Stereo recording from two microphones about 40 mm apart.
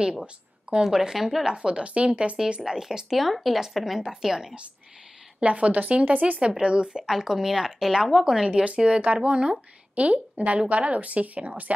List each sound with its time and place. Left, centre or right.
0.0 s a woman's voice: right
0.8 s a woman's voice: centre
1.4 s a woman's voice: right
3.1 s a woman's voice: centre
5.4 s speech: right
6.6 s speech: right
7.1 s a woman's voice: centre
8.5 s speech: right